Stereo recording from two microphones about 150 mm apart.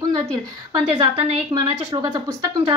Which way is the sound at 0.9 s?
40° right (ahead or behind).